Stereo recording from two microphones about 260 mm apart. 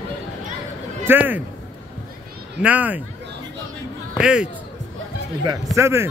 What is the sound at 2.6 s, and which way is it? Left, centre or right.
Speech, centre.